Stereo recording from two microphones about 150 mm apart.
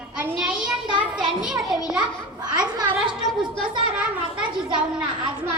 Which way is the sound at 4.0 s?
5° right (ahead or behind).